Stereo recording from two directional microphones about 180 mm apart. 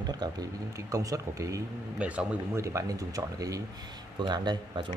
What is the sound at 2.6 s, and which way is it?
A man's voice, 20° right (ahead or behind).